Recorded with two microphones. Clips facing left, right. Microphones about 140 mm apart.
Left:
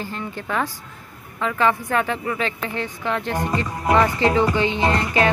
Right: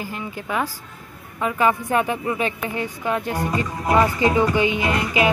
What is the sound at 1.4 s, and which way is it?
Speech, 15° right (ahead or behind).